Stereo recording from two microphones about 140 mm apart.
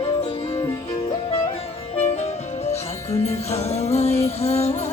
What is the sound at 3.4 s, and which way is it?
Music, 50° left (ahead or behind).